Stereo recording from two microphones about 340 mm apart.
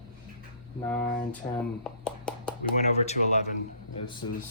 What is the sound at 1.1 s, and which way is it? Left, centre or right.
Speech, centre.